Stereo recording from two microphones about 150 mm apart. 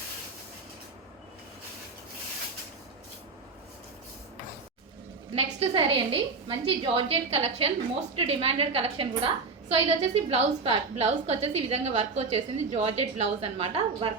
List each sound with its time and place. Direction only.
5.3 s a woman's voice: 45° right (ahead or behind)